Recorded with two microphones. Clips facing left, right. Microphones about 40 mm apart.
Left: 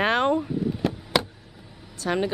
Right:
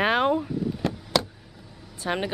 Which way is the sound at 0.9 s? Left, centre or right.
Left.